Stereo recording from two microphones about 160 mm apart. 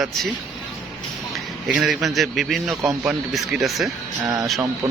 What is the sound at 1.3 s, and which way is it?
Speech, centre (ahead or behind).